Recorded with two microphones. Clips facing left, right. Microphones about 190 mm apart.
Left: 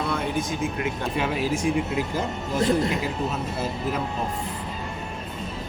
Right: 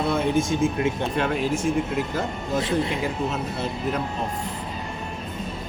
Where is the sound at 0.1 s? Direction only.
25° right (ahead or behind).